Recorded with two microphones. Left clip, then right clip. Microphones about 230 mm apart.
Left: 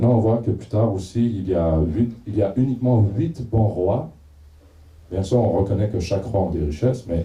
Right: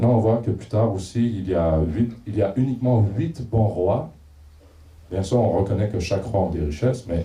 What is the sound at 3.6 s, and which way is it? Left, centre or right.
Speech, right.